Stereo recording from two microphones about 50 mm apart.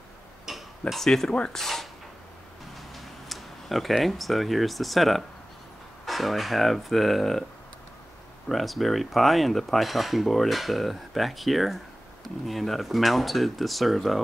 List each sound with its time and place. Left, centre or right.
0.5 s tick-tock: centre
0.9 s speech: centre
1.6 s speech: centre
2.9 s speech: centre
8.5 s speech: centre